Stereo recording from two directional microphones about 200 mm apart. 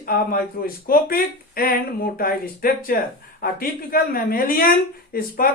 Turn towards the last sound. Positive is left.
turn(degrees=45)  # may be behind; listen again after turning